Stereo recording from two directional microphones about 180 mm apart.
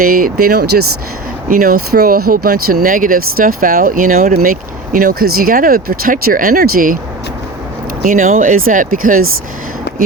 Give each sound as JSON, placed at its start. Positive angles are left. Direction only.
{"t": 0.0, "sound": "speech", "side_deg": -50}
{"t": 8.0, "sound": "speech", "side_deg": -45}